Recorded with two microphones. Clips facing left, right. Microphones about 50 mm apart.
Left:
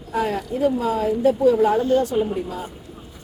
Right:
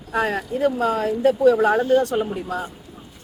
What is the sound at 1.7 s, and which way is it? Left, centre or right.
Speech, right.